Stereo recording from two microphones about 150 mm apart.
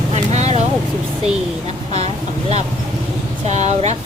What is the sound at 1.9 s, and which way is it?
Speech, 45° right (ahead or behind).